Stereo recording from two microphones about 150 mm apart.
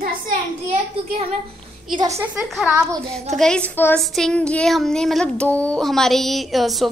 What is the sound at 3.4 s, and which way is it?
Speech, 5° left (ahead or behind).